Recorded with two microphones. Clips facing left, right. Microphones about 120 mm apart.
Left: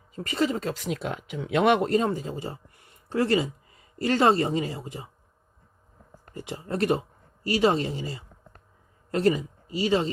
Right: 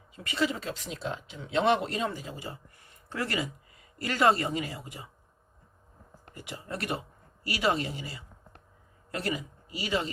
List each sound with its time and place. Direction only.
0.2 s speech: 40° left (ahead or behind)
0.9 s speech: 60° left (ahead or behind)
1.9 s speech: 40° left (ahead or behind)
6.3 s speech: 35° left (ahead or behind)